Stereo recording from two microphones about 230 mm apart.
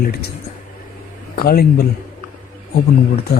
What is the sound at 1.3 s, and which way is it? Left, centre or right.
Speech, left.